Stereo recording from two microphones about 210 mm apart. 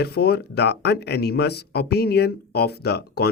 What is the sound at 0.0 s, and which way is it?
Speech, 50° left (ahead or behind).